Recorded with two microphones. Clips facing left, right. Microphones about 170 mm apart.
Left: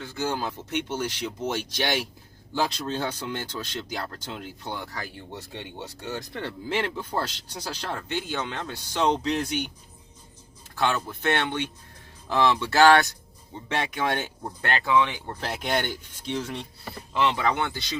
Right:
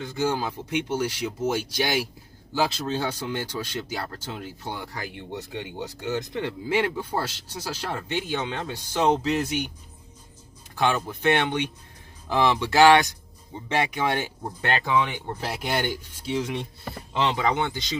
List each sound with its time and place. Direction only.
0.1 s speech: 10° right (ahead or behind)
5.1 s speech: 20° right (ahead or behind)
9.0 s speech: 5° right (ahead or behind)
10.8 s speech: 15° right (ahead or behind)